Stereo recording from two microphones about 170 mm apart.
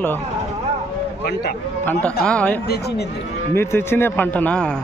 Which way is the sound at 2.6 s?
70° left (ahead or behind).